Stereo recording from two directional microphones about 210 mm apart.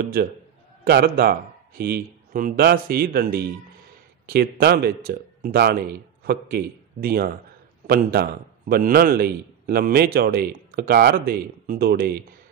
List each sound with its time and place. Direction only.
0.8 s a man's voice: 45° right (ahead or behind)